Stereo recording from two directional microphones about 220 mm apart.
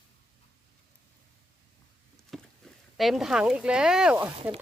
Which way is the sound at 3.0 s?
Centre (ahead or behind).